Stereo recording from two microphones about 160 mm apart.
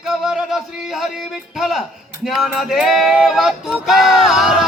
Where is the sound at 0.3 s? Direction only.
Centre (ahead or behind).